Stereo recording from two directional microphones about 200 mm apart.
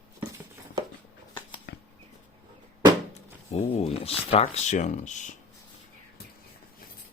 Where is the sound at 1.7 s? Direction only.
60° left (ahead or behind).